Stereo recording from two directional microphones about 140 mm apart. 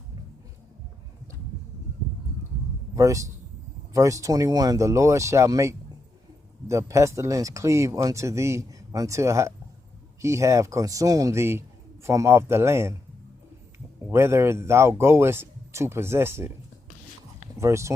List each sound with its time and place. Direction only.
2.9 s a man's voice: 25° right (ahead or behind)
14.1 s speech: 20° right (ahead or behind)
17.6 s speech: 20° right (ahead or behind)